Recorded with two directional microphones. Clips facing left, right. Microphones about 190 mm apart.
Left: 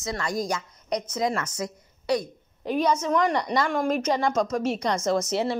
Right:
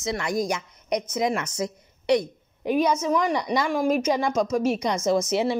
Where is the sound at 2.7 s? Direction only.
10° right (ahead or behind).